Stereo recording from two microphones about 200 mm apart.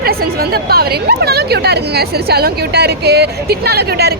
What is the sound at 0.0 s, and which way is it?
A woman's voice, 50° right (ahead or behind).